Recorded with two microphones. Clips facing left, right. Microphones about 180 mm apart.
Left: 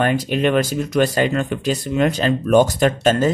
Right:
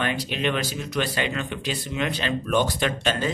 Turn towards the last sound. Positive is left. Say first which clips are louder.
# left 9 dB
turn(degrees=45)  # may be behind; listen again after turning